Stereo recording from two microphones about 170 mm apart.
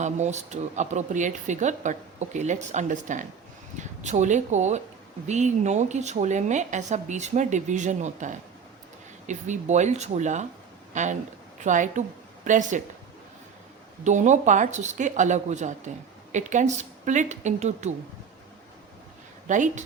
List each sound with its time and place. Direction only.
0.0 s speech: 45° right (ahead or behind)
14.0 s speech: 45° right (ahead or behind)
19.5 s speech: 45° right (ahead or behind)